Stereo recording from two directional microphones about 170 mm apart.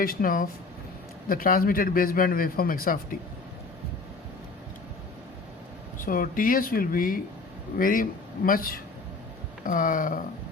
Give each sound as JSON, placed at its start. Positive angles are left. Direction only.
{"t": 0.0, "sound": "a man's voice", "side_deg": 55}
{"t": 6.0, "sound": "a man's voice", "side_deg": 55}